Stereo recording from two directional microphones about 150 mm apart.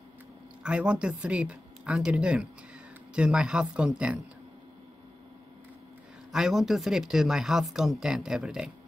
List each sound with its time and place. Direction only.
0.7 s speech: 5° right (ahead or behind)
6.3 s speech: 5° right (ahead or behind)